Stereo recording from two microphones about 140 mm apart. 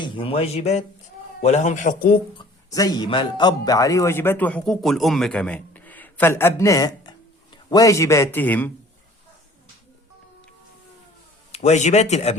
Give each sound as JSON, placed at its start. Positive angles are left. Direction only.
{"t": 0.0, "sound": "speech", "side_deg": 40}
{"t": 2.4, "sound": "a man's voice", "side_deg": 25}
{"t": 11.5, "sound": "speech", "side_deg": 55}